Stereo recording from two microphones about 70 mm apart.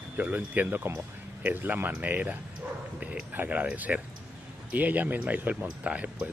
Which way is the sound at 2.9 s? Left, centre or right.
Right.